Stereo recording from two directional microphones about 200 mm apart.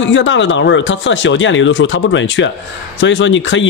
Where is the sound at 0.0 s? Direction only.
70° left (ahead or behind).